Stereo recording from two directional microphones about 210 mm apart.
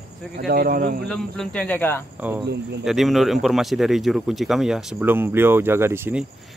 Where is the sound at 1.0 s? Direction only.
5° left (ahead or behind).